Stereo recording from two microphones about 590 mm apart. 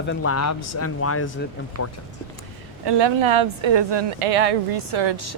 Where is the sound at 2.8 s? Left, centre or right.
Right.